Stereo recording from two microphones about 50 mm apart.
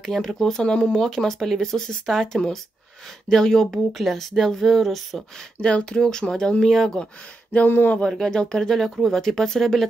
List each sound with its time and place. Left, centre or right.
0.0 s speech: centre
5.6 s speech: centre
7.5 s speech: left
8.1 s speech: centre